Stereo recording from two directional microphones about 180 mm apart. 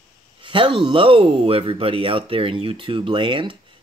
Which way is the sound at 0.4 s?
25° right (ahead or behind).